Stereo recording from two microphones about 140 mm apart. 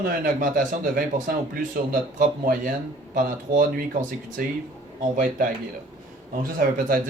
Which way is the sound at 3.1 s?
75° right (ahead or behind).